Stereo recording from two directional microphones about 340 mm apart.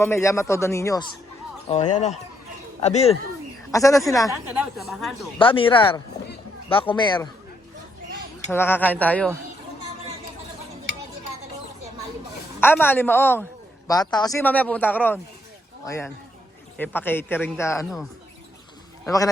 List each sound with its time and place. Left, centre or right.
0.0 s a man's voice: centre
2.8 s speech: centre
5.4 s a man's voice: centre
8.4 s speech: centre
12.5 s a man's voice: centre
19.0 s a man's voice: centre